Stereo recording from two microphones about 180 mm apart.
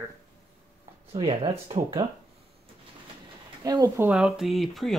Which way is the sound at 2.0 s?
25° right (ahead or behind).